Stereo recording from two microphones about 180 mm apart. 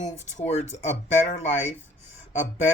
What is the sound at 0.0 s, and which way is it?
Speech, 40° left (ahead or behind).